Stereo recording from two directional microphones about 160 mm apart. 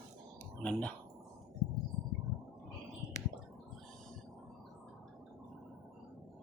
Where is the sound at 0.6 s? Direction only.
5° left (ahead or behind).